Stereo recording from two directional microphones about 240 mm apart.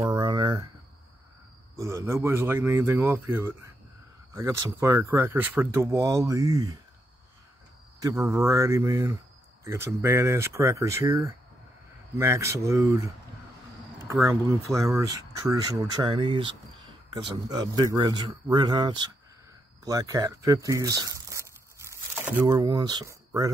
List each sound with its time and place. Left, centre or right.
0.0 s a sound: centre
1.8 s speech: centre
8.0 s speech: centre